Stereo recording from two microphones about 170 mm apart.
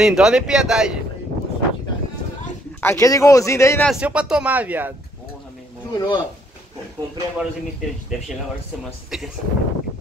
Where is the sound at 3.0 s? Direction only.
20° left (ahead or behind).